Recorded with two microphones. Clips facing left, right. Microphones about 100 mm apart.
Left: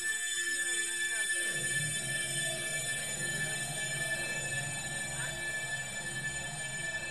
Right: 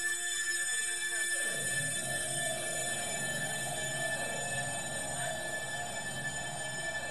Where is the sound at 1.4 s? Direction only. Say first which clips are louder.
Even; 30° right (ahead or behind).